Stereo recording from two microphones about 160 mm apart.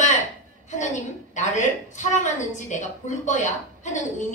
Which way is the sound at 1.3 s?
50° left (ahead or behind).